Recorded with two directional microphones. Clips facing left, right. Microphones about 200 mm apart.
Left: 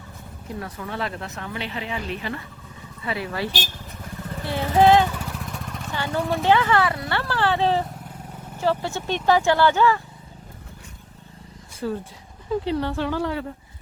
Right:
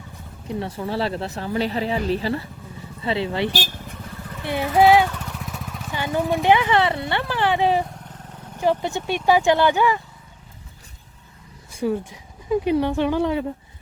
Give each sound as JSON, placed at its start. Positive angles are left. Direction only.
{"t": 0.4, "sound": "speech", "side_deg": -30}
{"t": 4.4, "sound": "vehicle", "side_deg": -15}
{"t": 5.0, "sound": "vehicle", "side_deg": 5}
{"t": 5.9, "sound": "a sound", "side_deg": -15}
{"t": 6.3, "sound": "speech", "side_deg": -15}
{"t": 11.8, "sound": "speech", "side_deg": -15}